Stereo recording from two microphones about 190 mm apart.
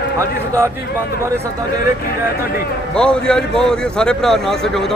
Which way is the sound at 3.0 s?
5° left (ahead or behind).